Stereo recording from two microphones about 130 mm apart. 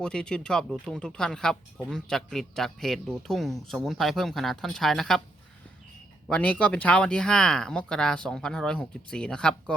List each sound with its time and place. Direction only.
0.0 s speech: 5° left (ahead or behind)
6.2 s speech: 10° left (ahead or behind)